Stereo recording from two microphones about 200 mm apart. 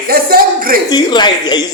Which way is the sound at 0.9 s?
20° left (ahead or behind).